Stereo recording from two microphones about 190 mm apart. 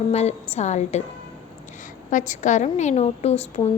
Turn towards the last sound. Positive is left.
turn(degrees=35)  # may be behind; listen again after turning